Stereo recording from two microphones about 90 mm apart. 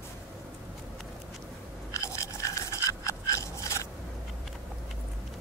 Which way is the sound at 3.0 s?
35° left (ahead or behind).